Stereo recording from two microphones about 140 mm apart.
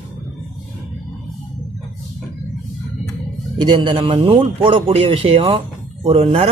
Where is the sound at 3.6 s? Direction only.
30° right (ahead or behind).